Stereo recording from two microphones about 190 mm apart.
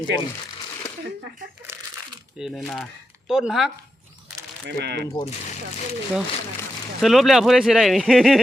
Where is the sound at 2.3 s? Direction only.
Centre (ahead or behind).